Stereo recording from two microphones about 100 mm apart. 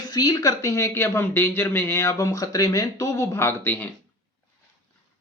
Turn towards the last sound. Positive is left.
turn(degrees=20)  # may be behind; listen again after turning